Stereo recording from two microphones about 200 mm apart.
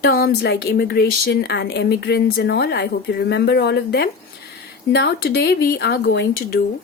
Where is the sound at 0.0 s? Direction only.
50° left (ahead or behind).